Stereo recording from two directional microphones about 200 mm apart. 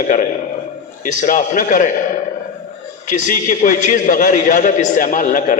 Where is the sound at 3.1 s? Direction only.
40° left (ahead or behind).